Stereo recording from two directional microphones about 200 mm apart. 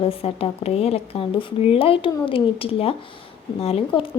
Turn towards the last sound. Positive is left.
turn(degrees=30)  # may be behind; listen again after turning